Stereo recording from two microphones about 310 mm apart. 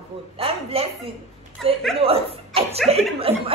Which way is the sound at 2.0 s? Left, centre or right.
Centre.